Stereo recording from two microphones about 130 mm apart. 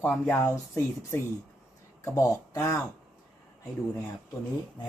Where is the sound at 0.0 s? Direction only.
10° left (ahead or behind).